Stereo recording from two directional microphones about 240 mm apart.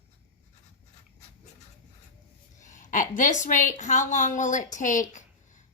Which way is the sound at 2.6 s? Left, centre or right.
Left.